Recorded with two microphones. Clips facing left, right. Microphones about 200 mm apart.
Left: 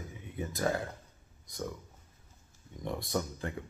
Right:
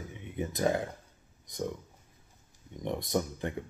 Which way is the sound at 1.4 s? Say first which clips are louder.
Right 4 dB; 20° right (ahead or behind).